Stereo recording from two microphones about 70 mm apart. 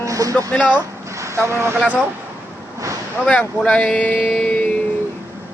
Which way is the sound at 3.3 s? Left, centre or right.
Centre.